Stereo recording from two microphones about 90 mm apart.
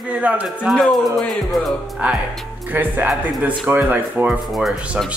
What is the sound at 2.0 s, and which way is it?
Speech, 15° right (ahead or behind).